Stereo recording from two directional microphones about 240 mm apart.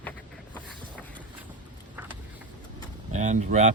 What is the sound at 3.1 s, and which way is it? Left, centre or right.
Speech, right.